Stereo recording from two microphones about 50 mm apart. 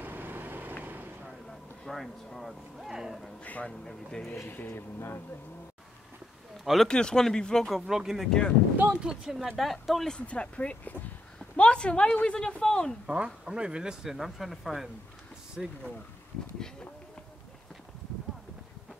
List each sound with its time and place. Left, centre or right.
0.0 s vehicle: right
1.5 s speech: centre
3.6 s speech: centre
4.5 s speech: left
6.6 s speech: centre
6.9 s speech: centre
7.6 s speech: centre
8.3 s speech: centre
8.8 s speech: centre
10.1 s speech: left
13.0 s speech: centre
14.0 s speech: centre